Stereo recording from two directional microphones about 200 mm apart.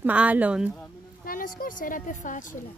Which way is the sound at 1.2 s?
45° left (ahead or behind).